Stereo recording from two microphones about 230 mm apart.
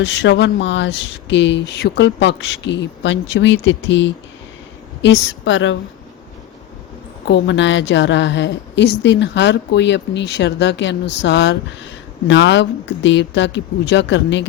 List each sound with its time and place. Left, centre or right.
0.0 s a woman's voice: left
7.3 s a woman's voice: left